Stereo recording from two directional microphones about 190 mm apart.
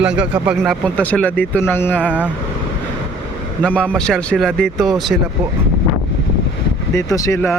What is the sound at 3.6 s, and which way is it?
Speech, 5° left (ahead or behind).